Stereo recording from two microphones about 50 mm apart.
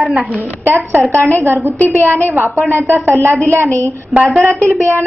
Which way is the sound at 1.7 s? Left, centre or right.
Left.